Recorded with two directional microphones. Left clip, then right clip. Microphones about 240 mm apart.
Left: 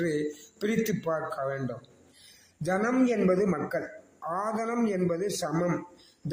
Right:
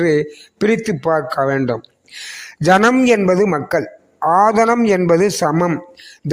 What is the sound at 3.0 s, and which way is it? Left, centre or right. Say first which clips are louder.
Speech: right 12 dB; right.